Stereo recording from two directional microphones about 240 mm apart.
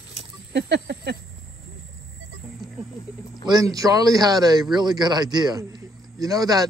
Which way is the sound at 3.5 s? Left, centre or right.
Centre.